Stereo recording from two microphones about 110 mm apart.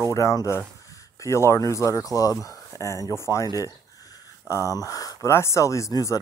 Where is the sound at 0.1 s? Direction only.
30° left (ahead or behind).